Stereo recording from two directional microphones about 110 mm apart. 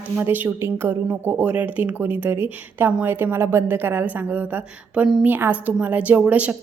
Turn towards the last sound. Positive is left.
turn(degrees=-10)  # may be behind; listen again after turning